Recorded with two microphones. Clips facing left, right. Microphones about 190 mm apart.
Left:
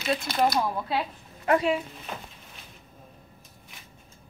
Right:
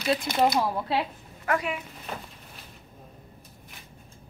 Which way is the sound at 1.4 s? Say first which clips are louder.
Left 5 dB; 25° left (ahead or behind).